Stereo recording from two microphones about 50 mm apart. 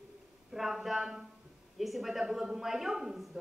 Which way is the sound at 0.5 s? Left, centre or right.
Centre.